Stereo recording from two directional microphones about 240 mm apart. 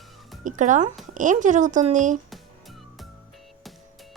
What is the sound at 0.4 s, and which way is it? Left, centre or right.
Speech, right.